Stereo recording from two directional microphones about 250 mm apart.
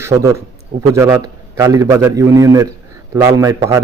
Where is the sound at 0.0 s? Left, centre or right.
Centre.